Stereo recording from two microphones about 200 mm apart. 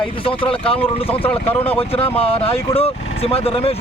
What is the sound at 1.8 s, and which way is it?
Speech, 30° left (ahead or behind).